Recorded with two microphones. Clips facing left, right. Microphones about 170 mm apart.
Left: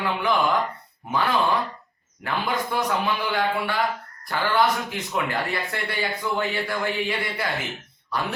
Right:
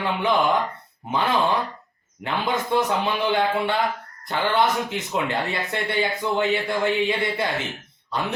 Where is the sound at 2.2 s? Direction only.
20° right (ahead or behind).